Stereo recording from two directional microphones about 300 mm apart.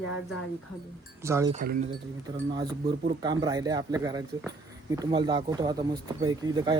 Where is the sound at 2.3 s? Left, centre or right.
Centre.